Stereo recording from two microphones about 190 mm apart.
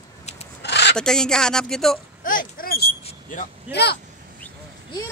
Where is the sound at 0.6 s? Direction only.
65° left (ahead or behind).